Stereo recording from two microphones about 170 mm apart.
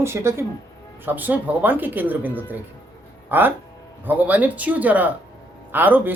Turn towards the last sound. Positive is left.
turn(degrees=-10)  # may be behind; listen again after turning